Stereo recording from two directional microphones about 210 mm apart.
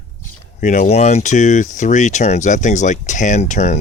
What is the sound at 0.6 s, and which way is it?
Speech, 35° left (ahead or behind).